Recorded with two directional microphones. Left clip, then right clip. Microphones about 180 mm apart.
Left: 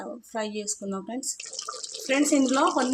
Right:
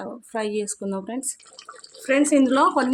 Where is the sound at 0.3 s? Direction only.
30° right (ahead or behind).